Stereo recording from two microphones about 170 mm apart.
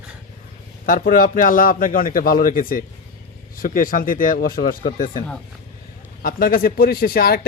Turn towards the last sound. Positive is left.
turn(degrees=60)  # may be behind; listen again after turning